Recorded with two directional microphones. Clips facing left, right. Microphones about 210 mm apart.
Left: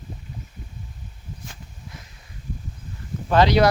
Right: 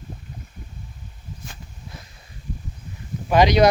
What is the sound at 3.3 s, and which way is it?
Speech, 15° right (ahead or behind).